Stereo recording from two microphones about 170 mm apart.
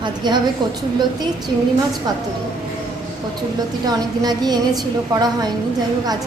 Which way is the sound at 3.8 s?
25° right (ahead or behind).